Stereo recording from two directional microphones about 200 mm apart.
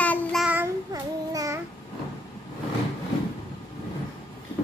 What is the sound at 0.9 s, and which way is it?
Child singing, 15° right (ahead or behind).